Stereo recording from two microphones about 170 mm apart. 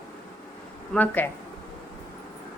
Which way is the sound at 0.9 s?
10° left (ahead or behind).